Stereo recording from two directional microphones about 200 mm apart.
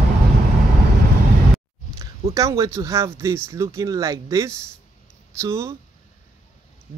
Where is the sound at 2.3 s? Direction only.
15° right (ahead or behind).